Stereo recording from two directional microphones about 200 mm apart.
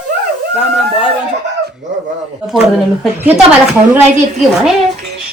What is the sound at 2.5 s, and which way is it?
Speech, centre (ahead or behind).